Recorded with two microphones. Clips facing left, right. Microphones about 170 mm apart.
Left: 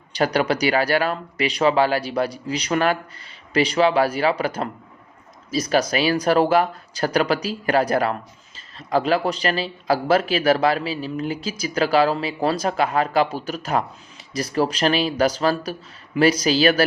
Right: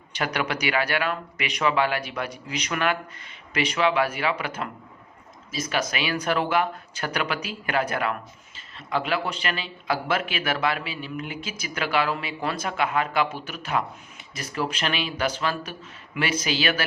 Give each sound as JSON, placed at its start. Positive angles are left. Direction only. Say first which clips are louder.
{"t": 0.1, "sound": "speech", "louder": "left 7 dB", "side_deg": 35}